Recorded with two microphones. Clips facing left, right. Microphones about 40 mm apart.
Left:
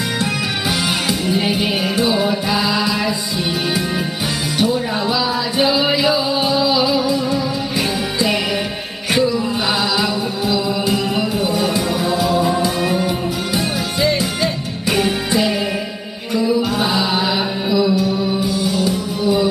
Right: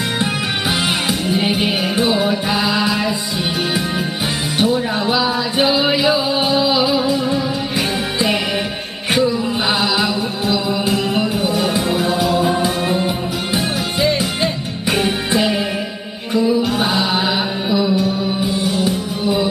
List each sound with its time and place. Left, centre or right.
1.0 s music: centre
4.5 s music: right
9.8 s music: centre
11.9 s music: right
14.0 s music: centre
16.3 s mantra: centre
16.6 s music: centre
17.7 s music: right